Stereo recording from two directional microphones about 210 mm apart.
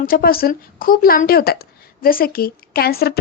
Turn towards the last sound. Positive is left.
turn(degrees=45)  # may be behind; listen again after turning